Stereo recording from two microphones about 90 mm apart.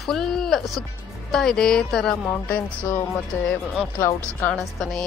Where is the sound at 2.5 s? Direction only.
20° left (ahead or behind).